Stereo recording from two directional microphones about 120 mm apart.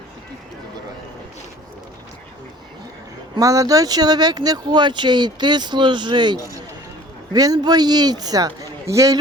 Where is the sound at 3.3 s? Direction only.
30° right (ahead or behind).